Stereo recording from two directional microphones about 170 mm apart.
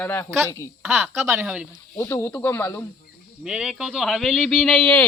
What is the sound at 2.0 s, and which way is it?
Speech, 15° left (ahead or behind).